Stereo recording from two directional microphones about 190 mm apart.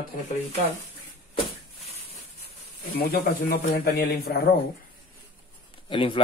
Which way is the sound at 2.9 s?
60° left (ahead or behind).